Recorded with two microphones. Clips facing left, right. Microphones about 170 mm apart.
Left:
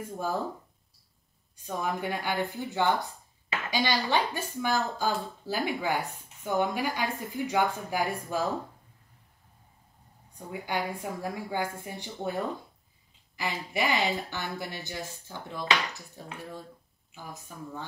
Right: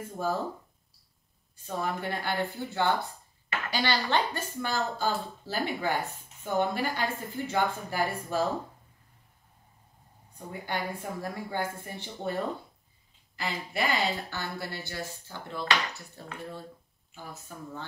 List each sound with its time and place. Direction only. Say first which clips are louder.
0.0 s a woman's voice: right 1 dB; 15° left (ahead or behind)
1.7 s a woman's voice: left 1 dB; 10° left (ahead or behind)
10.7 s a woman's voice: left 2 dB; 10° left (ahead or behind)
13.4 s a woman's voice: left 1 dB; 15° left (ahead or behind)